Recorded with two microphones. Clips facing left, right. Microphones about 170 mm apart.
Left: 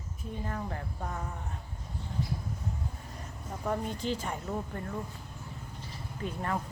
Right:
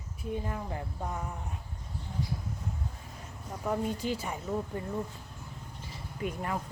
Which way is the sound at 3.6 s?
10° right (ahead or behind).